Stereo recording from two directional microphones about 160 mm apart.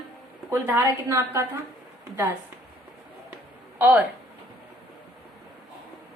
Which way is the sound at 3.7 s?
10° right (ahead or behind).